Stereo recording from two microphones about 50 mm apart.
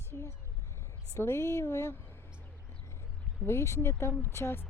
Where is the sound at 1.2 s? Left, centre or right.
Left.